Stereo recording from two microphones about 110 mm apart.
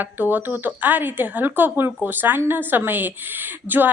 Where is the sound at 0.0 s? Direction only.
15° right (ahead or behind).